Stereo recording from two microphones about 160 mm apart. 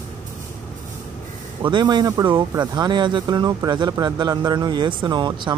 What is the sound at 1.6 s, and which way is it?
Speech, 25° right (ahead or behind).